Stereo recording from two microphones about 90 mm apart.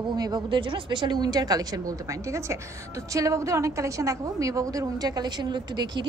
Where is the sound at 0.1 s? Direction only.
55° right (ahead or behind).